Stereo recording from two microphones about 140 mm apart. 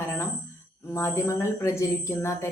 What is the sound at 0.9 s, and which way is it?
Speech, 20° left (ahead or behind).